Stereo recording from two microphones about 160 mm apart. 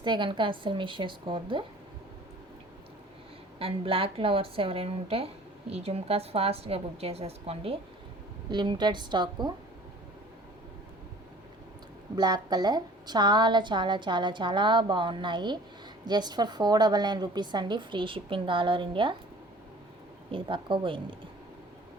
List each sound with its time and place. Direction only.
0.0 s a woman's voice: 30° right (ahead or behind)
3.6 s a woman's voice: 35° right (ahead or behind)
12.1 s a woman's voice: 25° right (ahead or behind)
20.3 s a woman's voice: 30° right (ahead or behind)